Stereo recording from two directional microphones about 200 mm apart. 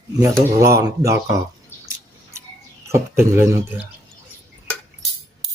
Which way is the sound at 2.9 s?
15° right (ahead or behind).